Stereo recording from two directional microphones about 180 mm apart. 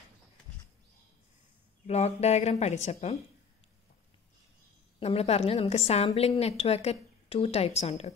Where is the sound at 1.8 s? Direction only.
35° left (ahead or behind).